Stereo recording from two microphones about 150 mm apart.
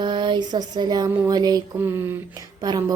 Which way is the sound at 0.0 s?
30° right (ahead or behind).